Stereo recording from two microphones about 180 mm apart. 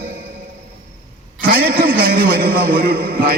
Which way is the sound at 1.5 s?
55° right (ahead or behind).